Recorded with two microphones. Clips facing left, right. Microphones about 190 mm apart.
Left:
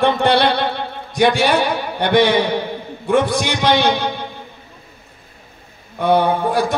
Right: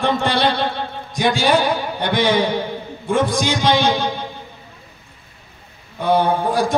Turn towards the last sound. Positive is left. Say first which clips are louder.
# left 1 dB
turn(degrees=60)  # may be behind; listen again after turning